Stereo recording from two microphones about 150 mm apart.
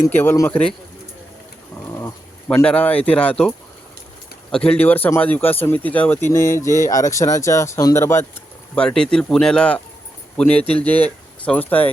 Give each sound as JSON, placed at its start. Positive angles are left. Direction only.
{"t": 0.0, "sound": "speech", "side_deg": 15}
{"t": 2.6, "sound": "speech", "side_deg": 10}
{"t": 4.5, "sound": "speech", "side_deg": 5}